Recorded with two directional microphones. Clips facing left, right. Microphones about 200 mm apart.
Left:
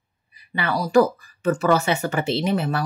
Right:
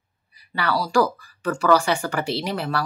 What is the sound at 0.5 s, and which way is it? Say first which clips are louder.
Speech: left 1 dB; 20° left (ahead or behind).